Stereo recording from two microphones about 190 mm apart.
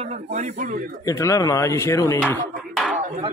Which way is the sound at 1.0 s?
15° left (ahead or behind).